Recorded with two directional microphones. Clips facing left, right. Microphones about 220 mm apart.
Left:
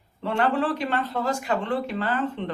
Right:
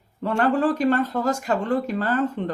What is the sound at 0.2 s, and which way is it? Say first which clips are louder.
Speech: right 3 dB; 45° right (ahead or behind).